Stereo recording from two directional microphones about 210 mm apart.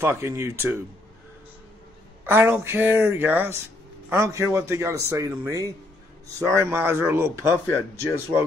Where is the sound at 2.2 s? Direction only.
10° right (ahead or behind).